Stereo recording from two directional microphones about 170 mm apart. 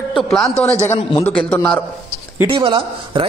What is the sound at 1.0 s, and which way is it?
Speech, 25° left (ahead or behind).